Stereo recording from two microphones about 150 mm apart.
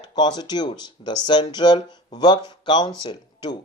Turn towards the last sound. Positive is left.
turn(degrees=30)  # may be behind; listen again after turning